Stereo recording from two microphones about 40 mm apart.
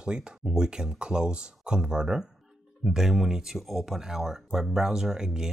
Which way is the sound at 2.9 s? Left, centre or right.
Centre.